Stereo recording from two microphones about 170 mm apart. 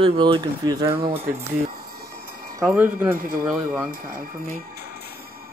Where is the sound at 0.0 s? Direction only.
30° right (ahead or behind).